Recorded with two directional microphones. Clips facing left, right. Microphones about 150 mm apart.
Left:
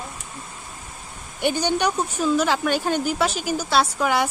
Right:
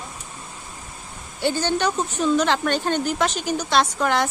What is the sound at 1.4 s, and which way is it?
A woman's voice, 15° left (ahead or behind).